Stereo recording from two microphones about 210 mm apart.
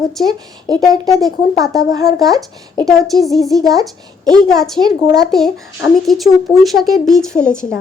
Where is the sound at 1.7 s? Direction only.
15° right (ahead or behind).